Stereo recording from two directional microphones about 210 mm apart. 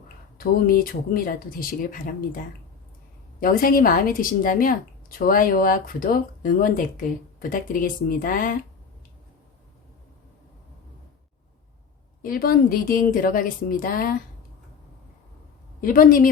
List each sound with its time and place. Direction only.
0.3 s a woman's voice: 45° left (ahead or behind)
12.2 s a woman's voice: 45° left (ahead or behind)
15.8 s a woman's voice: 40° left (ahead or behind)